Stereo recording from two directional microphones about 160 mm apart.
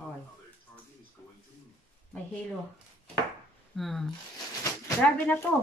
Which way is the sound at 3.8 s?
Centre (ahead or behind).